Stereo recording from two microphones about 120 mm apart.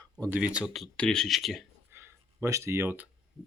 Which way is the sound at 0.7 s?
5° left (ahead or behind).